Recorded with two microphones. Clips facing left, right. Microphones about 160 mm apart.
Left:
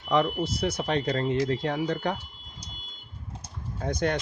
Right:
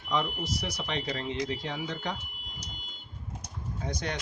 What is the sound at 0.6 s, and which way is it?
Speech, 50° left (ahead or behind).